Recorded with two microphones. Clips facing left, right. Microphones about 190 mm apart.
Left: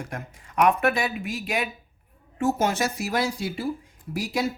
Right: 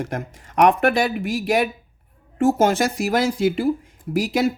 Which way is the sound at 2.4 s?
90° right.